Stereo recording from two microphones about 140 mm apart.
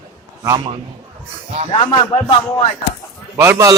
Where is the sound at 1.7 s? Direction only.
40° left (ahead or behind).